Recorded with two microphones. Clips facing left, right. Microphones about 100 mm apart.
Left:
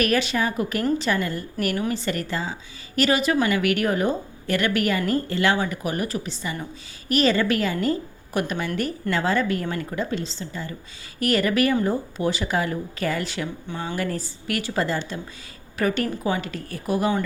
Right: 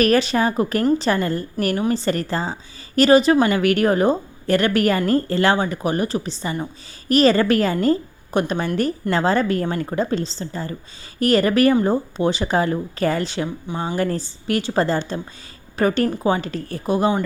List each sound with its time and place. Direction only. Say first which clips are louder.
0.0 s a woman's voice: right 5 dB; 35° right (ahead or behind)